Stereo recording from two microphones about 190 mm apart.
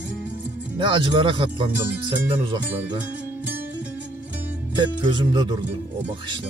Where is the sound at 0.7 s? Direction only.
25° right (ahead or behind).